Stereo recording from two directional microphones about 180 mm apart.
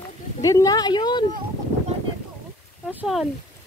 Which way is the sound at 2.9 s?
5° right (ahead or behind).